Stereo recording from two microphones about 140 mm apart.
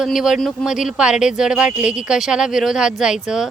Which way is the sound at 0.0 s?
5° right (ahead or behind).